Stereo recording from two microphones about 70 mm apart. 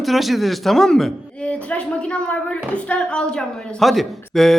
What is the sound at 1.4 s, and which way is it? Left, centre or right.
A woman's voice, centre.